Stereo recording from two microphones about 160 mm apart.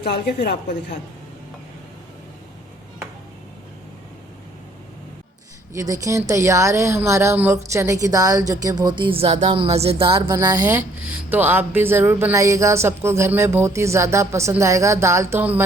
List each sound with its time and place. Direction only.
0.0 s a woman's voice: 90° left
5.7 s speech: 20° right (ahead or behind)
10.2 s speech: 20° right (ahead or behind)